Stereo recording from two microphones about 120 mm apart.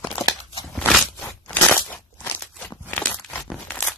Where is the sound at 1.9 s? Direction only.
15° left (ahead or behind).